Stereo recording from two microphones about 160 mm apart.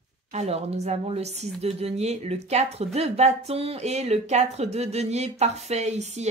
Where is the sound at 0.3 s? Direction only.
40° right (ahead or behind).